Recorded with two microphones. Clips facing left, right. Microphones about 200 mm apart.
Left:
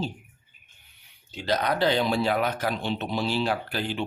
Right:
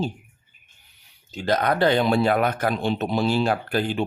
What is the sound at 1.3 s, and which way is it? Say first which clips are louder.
Speech: right 4 dB; 50° right (ahead or behind).